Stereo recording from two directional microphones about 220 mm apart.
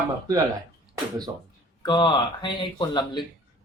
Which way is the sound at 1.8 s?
20° left (ahead or behind).